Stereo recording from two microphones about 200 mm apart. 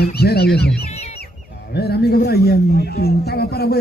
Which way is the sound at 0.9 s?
30° left (ahead or behind).